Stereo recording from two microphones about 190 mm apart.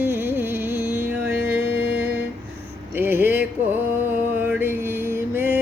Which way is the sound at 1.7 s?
70° left (ahead or behind).